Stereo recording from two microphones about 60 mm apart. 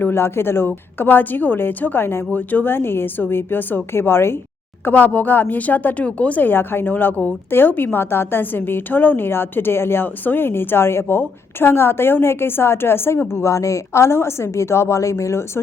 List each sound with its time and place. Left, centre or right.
0.0 s a woman's voice: left
4.9 s a woman's voice: left
13.3 s a woman's voice: left